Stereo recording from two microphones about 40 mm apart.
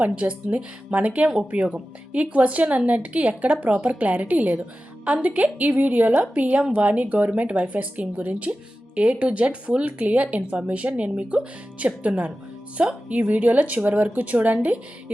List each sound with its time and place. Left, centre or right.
0.0 s a woman's voice: right